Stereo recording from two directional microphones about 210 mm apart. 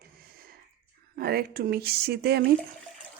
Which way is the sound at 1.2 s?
45° right (ahead or behind).